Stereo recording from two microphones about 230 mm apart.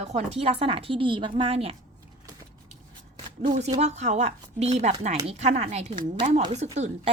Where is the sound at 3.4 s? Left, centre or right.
Right.